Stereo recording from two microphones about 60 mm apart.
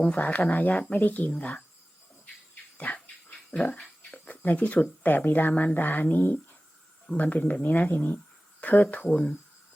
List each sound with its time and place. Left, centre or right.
0.2 s speech: left
3.5 s a sound: left
4.1 s speech: left